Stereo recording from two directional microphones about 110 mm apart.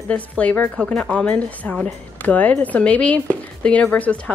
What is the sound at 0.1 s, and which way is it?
A woman's voice, 15° left (ahead or behind).